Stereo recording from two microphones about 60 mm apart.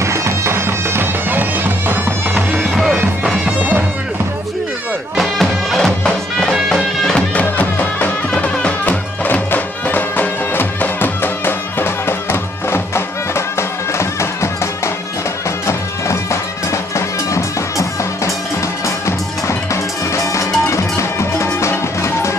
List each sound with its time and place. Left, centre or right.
0.0 s bagpipes: right
2.7 s music: centre
5.1 s bagpipes: centre
6.5 s music: centre
7.4 s music: left